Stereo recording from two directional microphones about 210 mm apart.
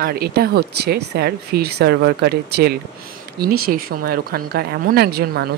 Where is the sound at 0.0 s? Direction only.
45° right (ahead or behind).